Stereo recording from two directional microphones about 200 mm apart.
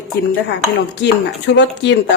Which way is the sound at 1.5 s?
60° left (ahead or behind).